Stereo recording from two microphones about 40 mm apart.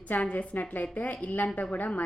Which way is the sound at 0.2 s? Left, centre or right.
Left.